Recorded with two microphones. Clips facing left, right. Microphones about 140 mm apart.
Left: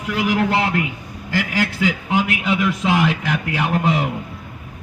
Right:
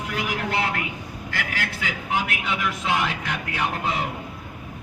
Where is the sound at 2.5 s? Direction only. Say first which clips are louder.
Left 7 dB; 90° left.